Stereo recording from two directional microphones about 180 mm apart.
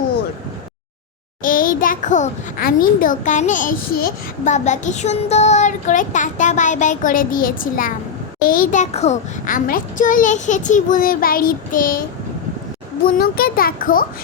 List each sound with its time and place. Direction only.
1.4 s a child's voice: 50° left (ahead or behind)
13.1 s a child's voice: 55° left (ahead or behind)